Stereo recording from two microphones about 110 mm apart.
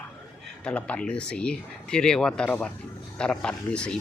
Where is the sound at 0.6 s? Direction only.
10° left (ahead or behind).